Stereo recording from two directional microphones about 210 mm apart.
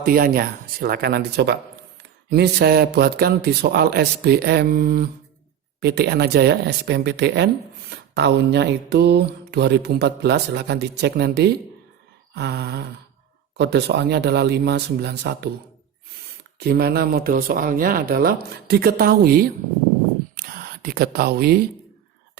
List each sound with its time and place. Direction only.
0.0 s speech: 45° right (ahead or behind)
16.6 s speech: 50° right (ahead or behind)
20.3 s a sound: 50° right (ahead or behind)